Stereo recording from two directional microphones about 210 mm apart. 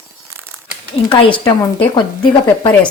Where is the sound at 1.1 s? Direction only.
25° left (ahead or behind).